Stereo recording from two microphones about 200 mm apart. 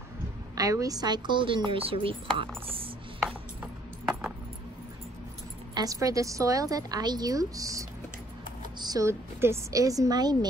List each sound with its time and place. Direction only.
0.6 s speech: 15° right (ahead or behind)
5.8 s a woman's voice: 15° right (ahead or behind)